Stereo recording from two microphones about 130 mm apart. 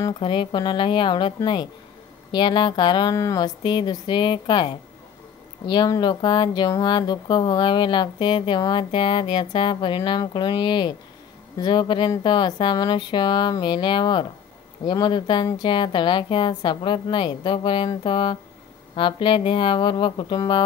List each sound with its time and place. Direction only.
0.2 s speech: 40° left (ahead or behind)